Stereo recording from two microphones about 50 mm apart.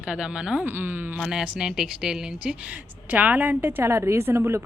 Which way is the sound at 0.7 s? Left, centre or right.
Right.